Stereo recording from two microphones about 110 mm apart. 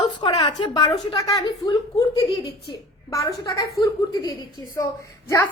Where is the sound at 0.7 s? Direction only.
35° left (ahead or behind).